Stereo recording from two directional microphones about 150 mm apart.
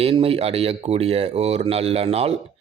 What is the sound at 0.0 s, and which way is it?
A man's voice, 40° right (ahead or behind).